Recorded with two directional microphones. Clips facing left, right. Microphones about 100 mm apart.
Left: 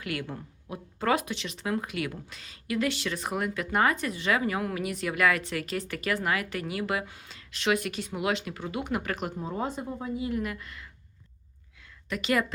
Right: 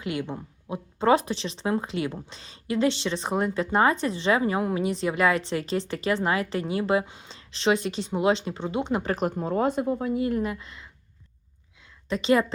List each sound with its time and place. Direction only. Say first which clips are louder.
0.0 s speech: right 4 dB; 20° right (ahead or behind)
9.3 s speech: right 8 dB; 65° right (ahead or behind)
10.4 s speech: right 4 dB; 25° right (ahead or behind)
12.0 s speech: right 5 dB; 25° right (ahead or behind)